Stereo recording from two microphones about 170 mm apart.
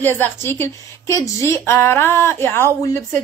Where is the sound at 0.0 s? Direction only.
15° left (ahead or behind).